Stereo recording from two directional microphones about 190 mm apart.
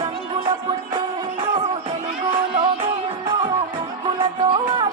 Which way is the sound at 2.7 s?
25° right (ahead or behind).